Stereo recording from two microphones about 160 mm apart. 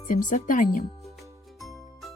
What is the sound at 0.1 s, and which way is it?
Speech, 55° left (ahead or behind).